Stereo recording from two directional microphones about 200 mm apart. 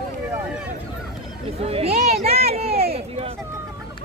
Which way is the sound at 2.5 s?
30° right (ahead or behind).